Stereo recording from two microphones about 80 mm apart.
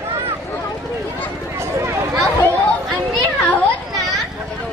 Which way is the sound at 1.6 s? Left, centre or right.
Right.